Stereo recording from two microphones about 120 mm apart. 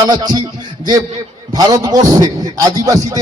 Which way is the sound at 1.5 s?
30° right (ahead or behind).